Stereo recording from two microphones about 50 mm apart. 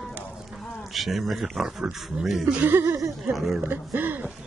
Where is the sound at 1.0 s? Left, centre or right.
Centre.